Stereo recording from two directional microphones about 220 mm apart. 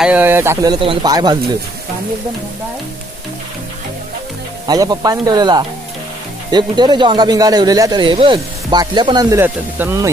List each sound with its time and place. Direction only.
0.0 s speech: 10° right (ahead or behind)
4.6 s speech: 15° right (ahead or behind)